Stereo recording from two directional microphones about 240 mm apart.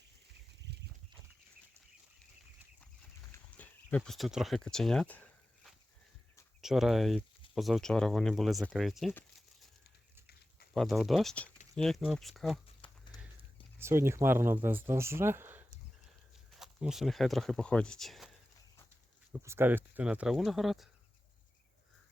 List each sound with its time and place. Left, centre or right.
0.7 s a sound: right
3.3 s a sound: centre
6.6 s speech: centre
10.8 s speech: centre
12.8 s clip-clop: centre
13.7 s speech: centre
19.3 s speech: centre